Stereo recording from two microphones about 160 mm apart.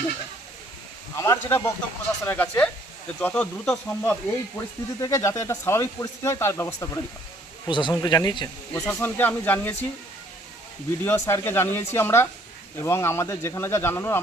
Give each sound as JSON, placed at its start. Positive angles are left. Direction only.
{"t": 1.1, "sound": "speech", "side_deg": 15}
{"t": 7.7, "sound": "speech", "side_deg": 30}
{"t": 8.7, "sound": "speech", "side_deg": 15}
{"t": 11.0, "sound": "speech", "side_deg": 15}